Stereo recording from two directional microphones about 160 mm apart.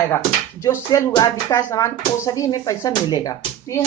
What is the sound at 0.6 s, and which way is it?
A woman's voice, 20° left (ahead or behind).